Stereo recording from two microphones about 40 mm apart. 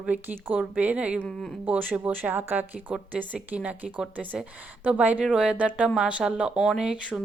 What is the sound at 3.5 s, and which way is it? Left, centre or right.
Speech, right.